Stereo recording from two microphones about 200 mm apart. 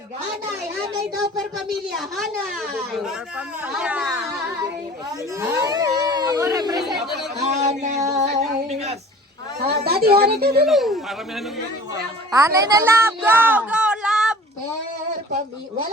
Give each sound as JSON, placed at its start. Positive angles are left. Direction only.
{"t": 1.1, "sound": "speech", "side_deg": 0}
{"t": 5.0, "sound": "a sound", "side_deg": -15}
{"t": 6.7, "sound": "chatter", "side_deg": 0}
{"t": 7.6, "sound": "a sound", "side_deg": -35}
{"t": 9.6, "sound": "speech", "side_deg": -50}
{"t": 10.7, "sound": "speech", "side_deg": 0}
{"t": 12.3, "sound": "a woman's voice", "side_deg": -15}